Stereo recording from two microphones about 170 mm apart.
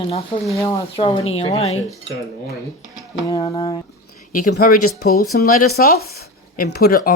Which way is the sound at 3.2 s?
20° left (ahead or behind).